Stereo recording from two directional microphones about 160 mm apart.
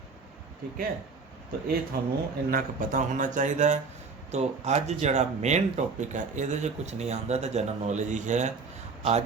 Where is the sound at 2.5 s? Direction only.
55° right (ahead or behind).